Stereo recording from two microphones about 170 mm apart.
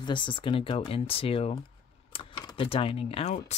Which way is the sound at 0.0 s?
30° left (ahead or behind).